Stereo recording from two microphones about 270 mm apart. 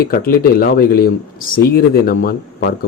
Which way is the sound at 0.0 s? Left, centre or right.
Left.